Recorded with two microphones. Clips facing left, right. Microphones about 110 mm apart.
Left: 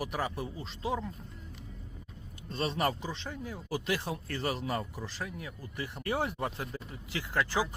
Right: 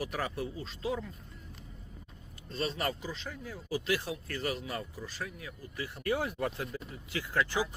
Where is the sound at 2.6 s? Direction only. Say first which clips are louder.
Left 3 dB; 30° left (ahead or behind).